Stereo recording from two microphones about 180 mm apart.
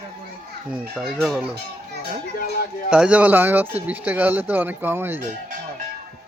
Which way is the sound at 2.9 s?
5° right (ahead or behind).